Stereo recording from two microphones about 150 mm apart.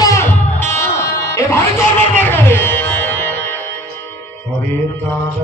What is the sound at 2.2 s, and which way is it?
Music, 10° left (ahead or behind).